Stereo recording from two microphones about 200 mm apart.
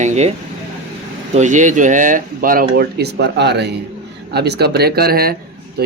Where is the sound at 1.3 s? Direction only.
35° right (ahead or behind).